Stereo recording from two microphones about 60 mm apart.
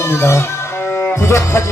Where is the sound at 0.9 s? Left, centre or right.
Left.